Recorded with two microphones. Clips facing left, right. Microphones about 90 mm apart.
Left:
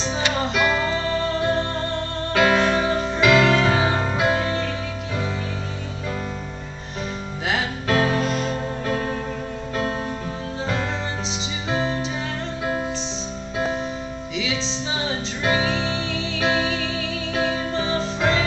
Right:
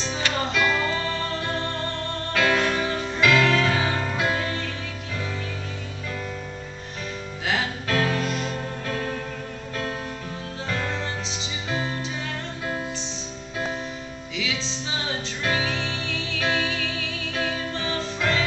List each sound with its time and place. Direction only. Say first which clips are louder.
0.0 s music: left 3 dB; 20° left (ahead or behind)
2.3 s music: left 4 dB; 25° left (ahead or behind)
3.2 s music: left 3 dB; 15° left (ahead or behind)
7.4 s music: left 3 dB; 20° left (ahead or behind)
8.3 s music: left 4 dB; 40° left (ahead or behind)
10.7 s music: left 1 dB; 20° left (ahead or behind)
14.3 s music: left 3 dB; 20° left (ahead or behind)